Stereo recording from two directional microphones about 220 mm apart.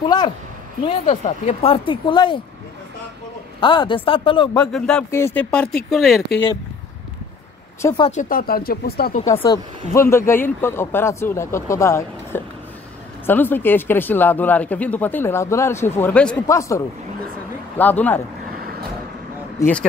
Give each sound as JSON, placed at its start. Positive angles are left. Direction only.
{"t": 0.0, "sound": "speech", "side_deg": 20}
{"t": 3.6, "sound": "speech", "side_deg": 20}
{"t": 4.6, "sound": "speech", "side_deg": 5}
{"t": 8.1, "sound": "speech", "side_deg": 35}
{"t": 9.9, "sound": "speech", "side_deg": 10}